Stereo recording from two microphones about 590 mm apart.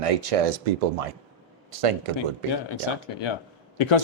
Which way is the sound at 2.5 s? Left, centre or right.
Left.